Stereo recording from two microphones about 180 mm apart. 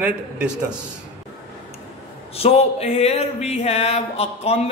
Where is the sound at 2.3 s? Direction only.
35° left (ahead or behind).